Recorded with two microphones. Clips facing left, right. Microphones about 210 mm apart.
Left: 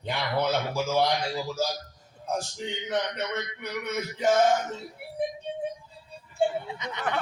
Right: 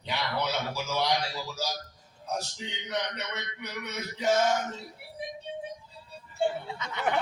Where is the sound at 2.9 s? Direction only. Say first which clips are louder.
Left 4 dB; 50° left (ahead or behind).